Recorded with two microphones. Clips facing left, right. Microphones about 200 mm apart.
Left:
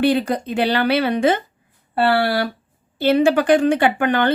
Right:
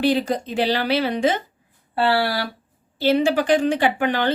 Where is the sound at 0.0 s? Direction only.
55° left (ahead or behind).